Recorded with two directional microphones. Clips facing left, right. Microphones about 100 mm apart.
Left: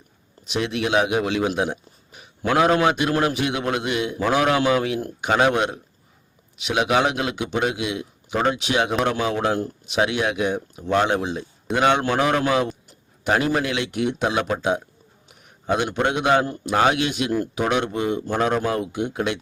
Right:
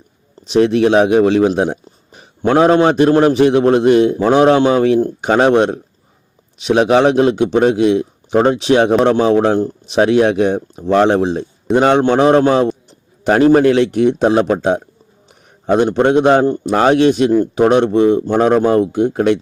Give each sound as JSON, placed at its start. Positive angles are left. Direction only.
{"t": 0.4, "sound": "speech", "side_deg": -35}